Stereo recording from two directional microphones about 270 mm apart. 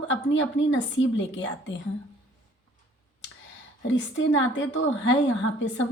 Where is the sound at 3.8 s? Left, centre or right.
Left.